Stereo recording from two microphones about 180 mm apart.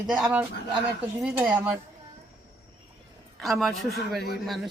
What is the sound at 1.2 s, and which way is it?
Speech, 5° right (ahead or behind).